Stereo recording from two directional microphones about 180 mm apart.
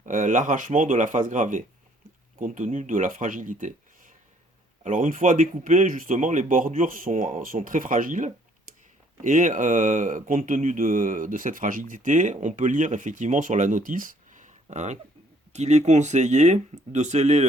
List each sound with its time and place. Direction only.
0.0 s speech: 45° right (ahead or behind)